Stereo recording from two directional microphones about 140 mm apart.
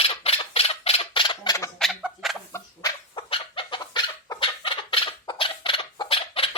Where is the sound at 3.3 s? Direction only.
40° left (ahead or behind).